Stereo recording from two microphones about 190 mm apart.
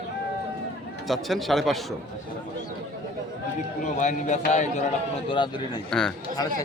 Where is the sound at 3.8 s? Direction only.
40° left (ahead or behind).